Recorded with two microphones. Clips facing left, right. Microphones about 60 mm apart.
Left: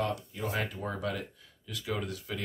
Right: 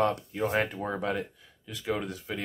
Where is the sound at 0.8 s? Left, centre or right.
Right.